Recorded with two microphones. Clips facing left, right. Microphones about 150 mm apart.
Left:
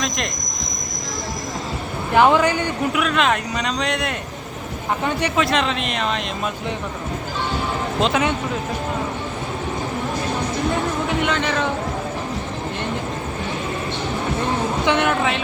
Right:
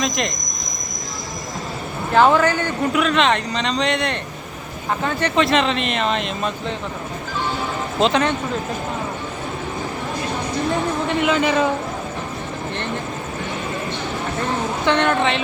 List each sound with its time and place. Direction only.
2.1 s speech: 15° left (ahead or behind)
2.9 s a man's voice: centre (ahead or behind)
5.4 s a man's voice: centre (ahead or behind)
8.0 s a man's voice: 5° left (ahead or behind)
11.2 s speech: 5° right (ahead or behind)
14.8 s speech: 10° left (ahead or behind)